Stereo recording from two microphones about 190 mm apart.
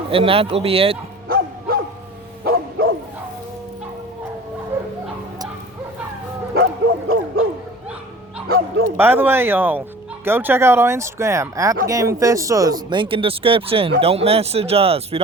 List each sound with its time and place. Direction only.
0.1 s speech: 30° right (ahead or behind)
1.3 s bow-wow: 50° right (ahead or behind)
4.7 s dog: 10° right (ahead or behind)
6.5 s bow-wow: 55° right (ahead or behind)
8.5 s bow-wow: 50° right (ahead or behind)
9.0 s speech: 10° right (ahead or behind); by 15.2 s 30° right (ahead or behind)